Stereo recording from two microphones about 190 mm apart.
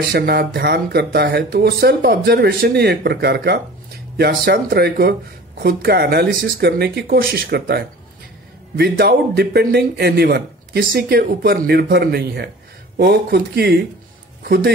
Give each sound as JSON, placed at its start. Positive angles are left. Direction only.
{"t": 0.1, "sound": "speech", "side_deg": -55}